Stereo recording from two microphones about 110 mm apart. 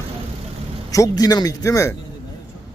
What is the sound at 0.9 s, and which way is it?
Speech, 30° left (ahead or behind).